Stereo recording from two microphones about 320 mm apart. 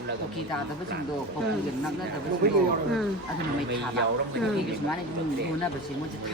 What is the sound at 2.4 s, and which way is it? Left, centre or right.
Speech, right.